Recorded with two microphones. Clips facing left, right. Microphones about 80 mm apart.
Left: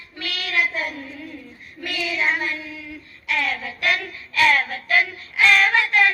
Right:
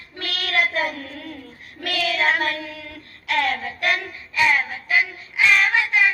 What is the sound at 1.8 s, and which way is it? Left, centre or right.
Child singing, right.